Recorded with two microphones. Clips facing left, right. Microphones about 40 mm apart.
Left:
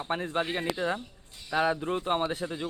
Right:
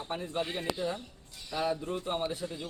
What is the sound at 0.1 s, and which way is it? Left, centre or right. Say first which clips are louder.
Speech: left 5 dB; left.